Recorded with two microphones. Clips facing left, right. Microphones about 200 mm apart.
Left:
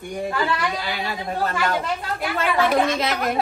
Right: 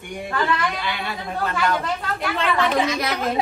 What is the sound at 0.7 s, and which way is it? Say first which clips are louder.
Speech: left 1 dB; 40° left (ahead or behind).